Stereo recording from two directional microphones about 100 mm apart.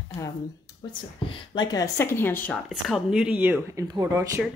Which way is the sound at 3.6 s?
35° right (ahead or behind).